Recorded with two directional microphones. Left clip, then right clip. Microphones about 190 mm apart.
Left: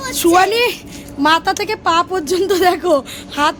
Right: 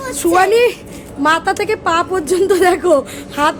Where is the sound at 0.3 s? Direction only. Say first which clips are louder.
Right 4 dB; 35° left (ahead or behind).